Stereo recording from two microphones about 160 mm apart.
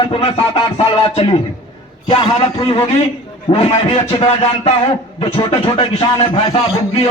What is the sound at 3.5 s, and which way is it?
Speech, 40° left (ahead or behind).